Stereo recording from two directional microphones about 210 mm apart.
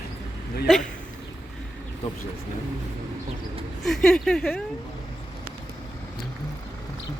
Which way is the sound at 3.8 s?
Centre (ahead or behind).